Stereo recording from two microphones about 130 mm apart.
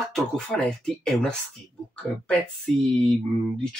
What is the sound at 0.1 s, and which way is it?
Speech, 5° left (ahead or behind).